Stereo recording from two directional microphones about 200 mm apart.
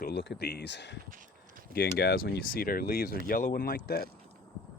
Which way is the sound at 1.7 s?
50° left (ahead or behind).